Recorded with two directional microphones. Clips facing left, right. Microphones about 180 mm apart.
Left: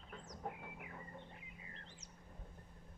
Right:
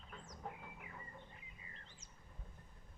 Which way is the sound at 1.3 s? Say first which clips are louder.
Left 4 dB; 70° left (ahead or behind).